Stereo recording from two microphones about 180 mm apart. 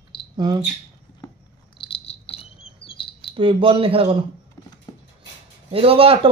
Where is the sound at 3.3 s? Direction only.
25° right (ahead or behind).